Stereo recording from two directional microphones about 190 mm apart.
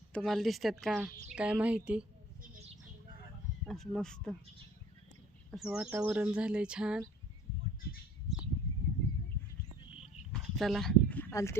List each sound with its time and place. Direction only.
0.1 s speech: centre (ahead or behind)
3.7 s speech: centre (ahead or behind)
5.5 s speech: centre (ahead or behind)
7.8 s bird: 55° left (ahead or behind)
9.0 s a sound: 15° left (ahead or behind)
10.3 s a sound: centre (ahead or behind)